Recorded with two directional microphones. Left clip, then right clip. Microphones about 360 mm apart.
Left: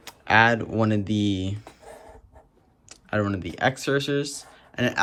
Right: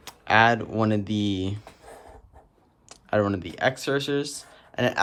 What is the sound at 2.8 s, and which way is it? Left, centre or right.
Speech, centre.